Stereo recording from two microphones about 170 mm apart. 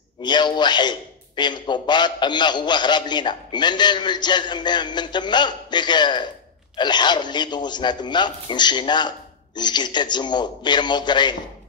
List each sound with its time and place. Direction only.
0.2 s a man's voice: 25° left (ahead or behind)